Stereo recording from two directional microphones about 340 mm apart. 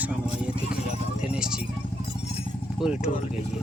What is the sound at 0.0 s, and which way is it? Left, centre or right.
Vehicle, centre.